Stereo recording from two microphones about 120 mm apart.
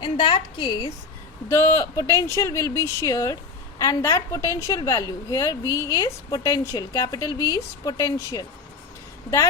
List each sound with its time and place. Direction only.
0.0 s a woman's voice: 40° left (ahead or behind)
1.5 s speech: 25° left (ahead or behind)